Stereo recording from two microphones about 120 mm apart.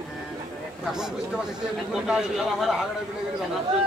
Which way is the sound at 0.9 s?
5° right (ahead or behind).